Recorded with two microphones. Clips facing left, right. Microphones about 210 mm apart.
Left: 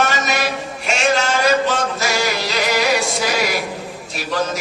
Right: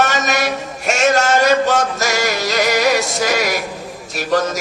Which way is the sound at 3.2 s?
45° right (ahead or behind).